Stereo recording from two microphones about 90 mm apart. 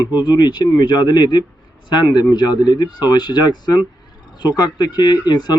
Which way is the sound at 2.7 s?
50° left (ahead or behind).